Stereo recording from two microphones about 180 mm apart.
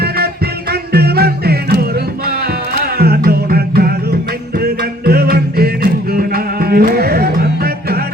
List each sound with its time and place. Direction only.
0.7 s music: 60° right (ahead or behind)
3.0 s music: 60° right (ahead or behind)